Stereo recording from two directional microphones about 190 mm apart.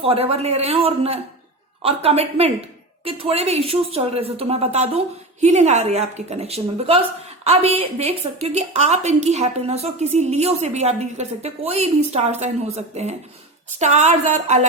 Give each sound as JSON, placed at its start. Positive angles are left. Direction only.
{"t": 0.0, "sound": "a woman's voice", "side_deg": -30}